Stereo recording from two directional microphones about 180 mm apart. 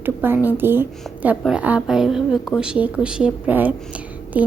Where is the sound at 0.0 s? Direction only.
10° right (ahead or behind).